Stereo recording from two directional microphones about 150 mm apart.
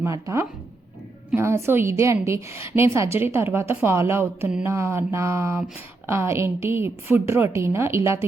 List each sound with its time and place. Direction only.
0.0 s a woman's voice: 20° right (ahead or behind)